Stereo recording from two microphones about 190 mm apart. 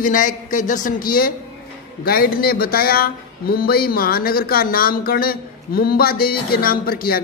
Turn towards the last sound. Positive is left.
turn(degrees=50)  # may be behind; listen again after turning